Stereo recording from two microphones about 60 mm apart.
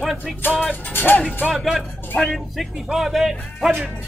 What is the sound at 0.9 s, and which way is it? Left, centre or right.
Speech, left.